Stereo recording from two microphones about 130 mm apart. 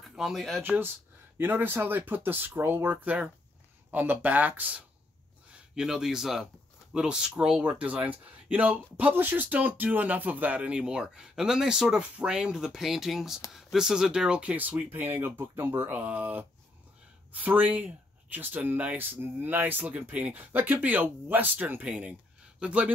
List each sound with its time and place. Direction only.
0.0 s speech: centre (ahead or behind)
0.6 s speech: 15° right (ahead or behind)